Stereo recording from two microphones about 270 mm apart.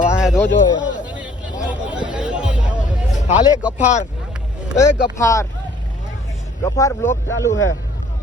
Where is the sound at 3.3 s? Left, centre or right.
Left.